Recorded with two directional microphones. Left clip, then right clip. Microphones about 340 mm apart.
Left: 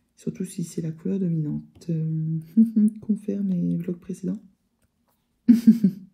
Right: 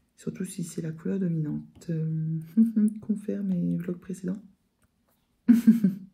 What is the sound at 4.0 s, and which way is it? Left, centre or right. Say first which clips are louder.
Speech: left 3 dB; left.